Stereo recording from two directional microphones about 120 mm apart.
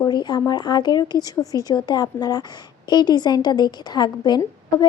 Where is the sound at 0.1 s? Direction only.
40° left (ahead or behind).